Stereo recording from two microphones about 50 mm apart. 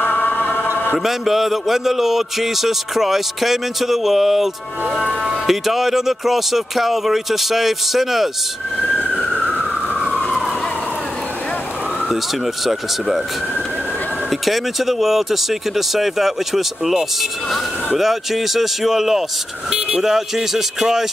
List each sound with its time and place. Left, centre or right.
0.0 s music: left
0.9 s a man's voice: centre
10.0 s emergency vehicle: centre
14.4 s a man's voice: centre